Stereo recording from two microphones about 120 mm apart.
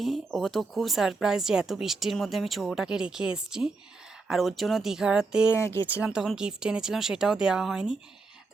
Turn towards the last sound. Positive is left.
turn(degrees=-5)  # may be behind; listen again after turning